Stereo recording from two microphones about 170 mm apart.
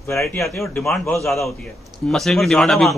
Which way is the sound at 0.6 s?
5° left (ahead or behind).